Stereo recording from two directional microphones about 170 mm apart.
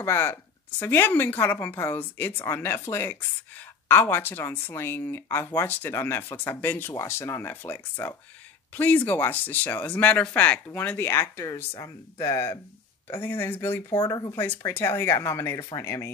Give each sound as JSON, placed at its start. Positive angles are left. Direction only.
{"t": 0.0, "sound": "speech", "side_deg": 15}